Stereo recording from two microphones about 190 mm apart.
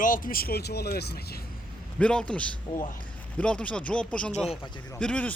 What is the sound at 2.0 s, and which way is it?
A man's voice, 5° left (ahead or behind).